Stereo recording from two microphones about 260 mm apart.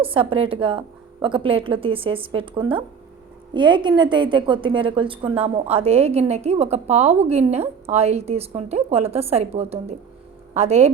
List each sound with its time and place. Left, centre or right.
0.0 s a woman's voice: right